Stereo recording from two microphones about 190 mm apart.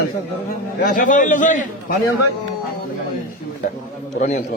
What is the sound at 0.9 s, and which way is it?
Speech, 45° left (ahead or behind).